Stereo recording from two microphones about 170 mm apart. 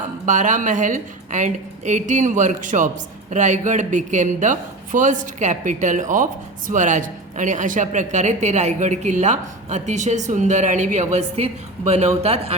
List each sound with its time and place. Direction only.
0.3 s a woman's voice: 45° right (ahead or behind)